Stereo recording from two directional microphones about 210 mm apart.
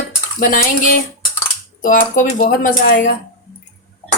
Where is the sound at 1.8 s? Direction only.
40° left (ahead or behind).